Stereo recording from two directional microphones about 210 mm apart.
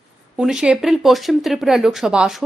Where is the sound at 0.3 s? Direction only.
5° right (ahead or behind).